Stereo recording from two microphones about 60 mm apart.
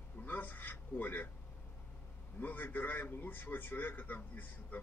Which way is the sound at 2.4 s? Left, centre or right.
Left.